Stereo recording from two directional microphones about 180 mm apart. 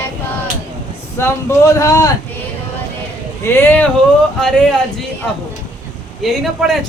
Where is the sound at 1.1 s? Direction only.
15° left (ahead or behind).